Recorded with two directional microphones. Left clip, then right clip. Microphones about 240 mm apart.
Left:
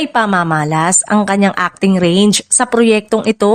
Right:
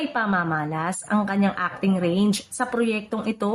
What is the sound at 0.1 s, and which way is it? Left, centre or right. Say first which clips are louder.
A woman's voice: left 11 dB; left.